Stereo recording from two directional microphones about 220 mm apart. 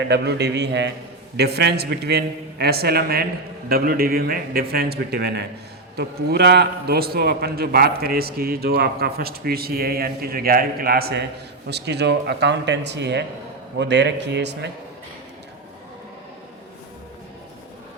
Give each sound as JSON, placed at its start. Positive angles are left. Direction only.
{"t": 0.1, "sound": "a man's voice", "side_deg": -50}